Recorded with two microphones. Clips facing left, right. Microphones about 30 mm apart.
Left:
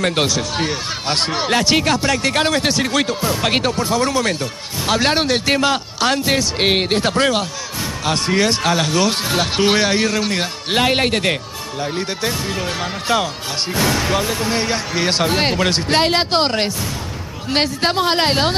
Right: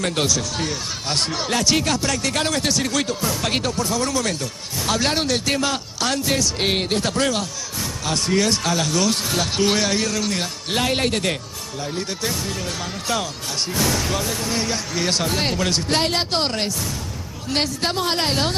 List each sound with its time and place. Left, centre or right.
0.0 s speech: left